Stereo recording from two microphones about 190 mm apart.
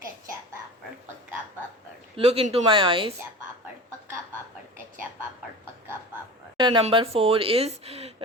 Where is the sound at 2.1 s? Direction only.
30° right (ahead or behind).